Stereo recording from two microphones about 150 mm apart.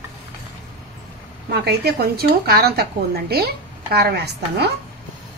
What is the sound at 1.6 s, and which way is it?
Speech, 90° right.